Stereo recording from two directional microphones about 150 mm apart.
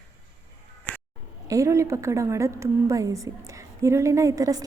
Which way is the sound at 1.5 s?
20° right (ahead or behind).